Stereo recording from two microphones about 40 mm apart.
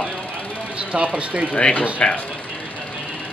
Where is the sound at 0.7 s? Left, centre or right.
Right.